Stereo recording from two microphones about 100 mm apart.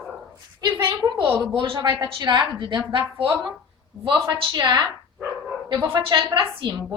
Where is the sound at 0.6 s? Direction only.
45° right (ahead or behind).